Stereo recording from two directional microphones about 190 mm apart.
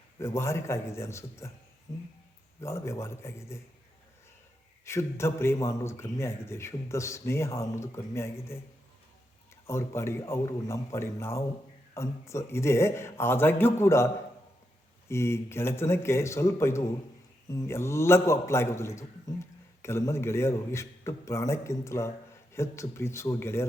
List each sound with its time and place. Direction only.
0.2 s a man's voice: 15° left (ahead or behind)
2.6 s a man's voice: 15° left (ahead or behind)
4.9 s a man's voice: 15° left (ahead or behind)
9.6 s a man's voice: 15° left (ahead or behind)
15.1 s a man's voice: 15° left (ahead or behind)